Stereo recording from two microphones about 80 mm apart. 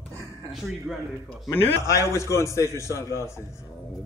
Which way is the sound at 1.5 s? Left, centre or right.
Left.